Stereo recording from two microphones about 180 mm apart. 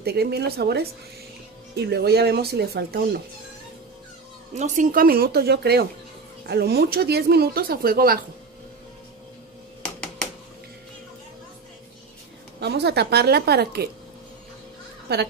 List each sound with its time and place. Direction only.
0.0 s speech: 60° right (ahead or behind)
4.6 s speech: 45° right (ahead or behind)
12.5 s speech: 65° right (ahead or behind)
15.1 s speech: 65° right (ahead or behind)